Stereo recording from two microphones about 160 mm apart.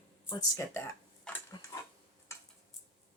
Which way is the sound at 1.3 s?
5° left (ahead or behind).